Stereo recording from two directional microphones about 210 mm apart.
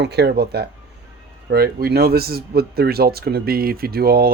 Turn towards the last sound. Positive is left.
turn(degrees=-45)  # may be behind; listen again after turning